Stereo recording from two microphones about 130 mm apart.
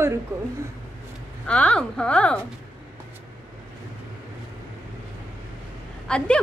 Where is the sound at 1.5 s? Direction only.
10° left (ahead or behind).